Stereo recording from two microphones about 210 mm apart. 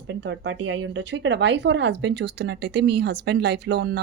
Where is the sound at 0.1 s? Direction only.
60° right (ahead or behind).